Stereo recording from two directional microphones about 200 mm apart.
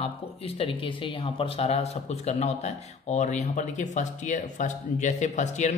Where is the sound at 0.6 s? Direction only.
25° left (ahead or behind).